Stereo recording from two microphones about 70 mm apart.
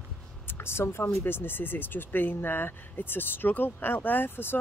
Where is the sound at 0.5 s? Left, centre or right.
Left.